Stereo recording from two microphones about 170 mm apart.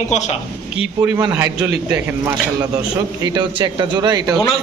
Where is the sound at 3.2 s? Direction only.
25° right (ahead or behind).